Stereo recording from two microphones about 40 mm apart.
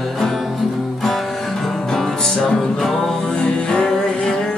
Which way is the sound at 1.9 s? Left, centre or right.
Centre.